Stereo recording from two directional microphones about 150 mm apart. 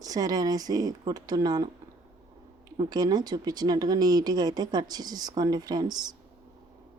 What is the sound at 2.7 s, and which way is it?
Speech, 25° right (ahead or behind).